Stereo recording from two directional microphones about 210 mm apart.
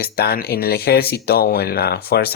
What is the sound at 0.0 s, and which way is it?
Speech, 45° left (ahead or behind).